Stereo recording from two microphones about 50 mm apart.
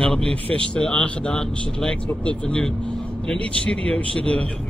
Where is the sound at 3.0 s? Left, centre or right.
Left.